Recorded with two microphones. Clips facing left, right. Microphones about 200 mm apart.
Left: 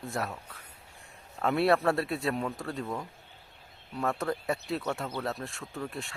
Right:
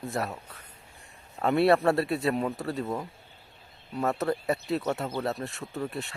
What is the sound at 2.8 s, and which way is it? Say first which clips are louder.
Speech: right 2 dB; 20° right (ahead or behind).